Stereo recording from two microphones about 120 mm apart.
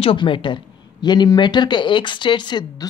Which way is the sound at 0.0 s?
45° left (ahead or behind).